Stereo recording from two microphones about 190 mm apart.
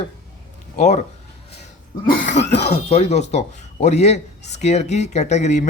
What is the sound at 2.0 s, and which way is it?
A man's voice, 40° left (ahead or behind).